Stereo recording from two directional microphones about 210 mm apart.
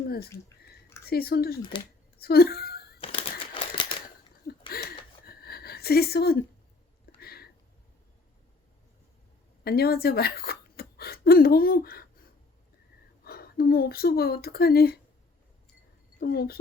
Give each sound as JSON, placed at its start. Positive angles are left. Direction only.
{"t": 1.0, "sound": "speech", "side_deg": 45}
{"t": 2.2, "sound": "a sound", "side_deg": 45}
{"t": 3.0, "sound": "crumpling", "side_deg": 25}
{"t": 4.7, "sound": "a sound", "side_deg": 45}
{"t": 9.6, "sound": "speech", "side_deg": 45}
{"t": 13.2, "sound": "speech", "side_deg": 45}
{"t": 16.2, "sound": "speech", "side_deg": 45}